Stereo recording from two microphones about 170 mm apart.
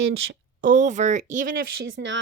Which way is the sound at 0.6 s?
50° right (ahead or behind).